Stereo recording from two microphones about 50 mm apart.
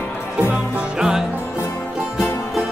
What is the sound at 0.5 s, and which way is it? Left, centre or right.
Music, centre.